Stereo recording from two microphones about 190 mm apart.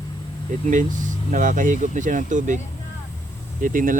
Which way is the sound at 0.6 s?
40° right (ahead or behind).